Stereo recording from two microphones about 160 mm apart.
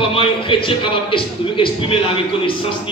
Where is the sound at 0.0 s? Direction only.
35° left (ahead or behind).